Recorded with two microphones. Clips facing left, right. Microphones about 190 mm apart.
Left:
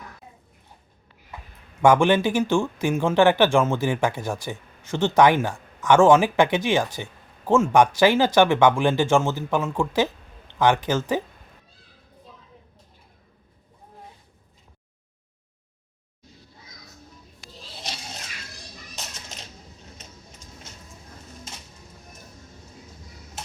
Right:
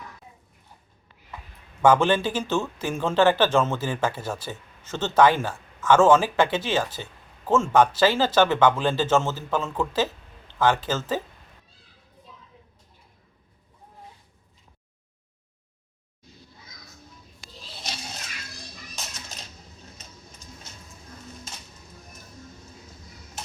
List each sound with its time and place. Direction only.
1.8 s speech: 15° left (ahead or behind)